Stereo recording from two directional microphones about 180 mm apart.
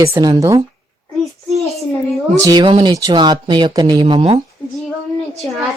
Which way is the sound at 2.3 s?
20° right (ahead or behind).